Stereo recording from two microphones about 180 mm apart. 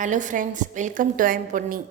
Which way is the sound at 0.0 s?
45° right (ahead or behind).